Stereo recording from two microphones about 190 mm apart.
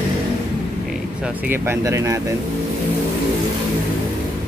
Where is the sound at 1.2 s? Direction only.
10° right (ahead or behind).